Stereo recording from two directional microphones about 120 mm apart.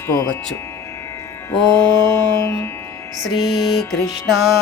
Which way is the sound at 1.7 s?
35° right (ahead or behind).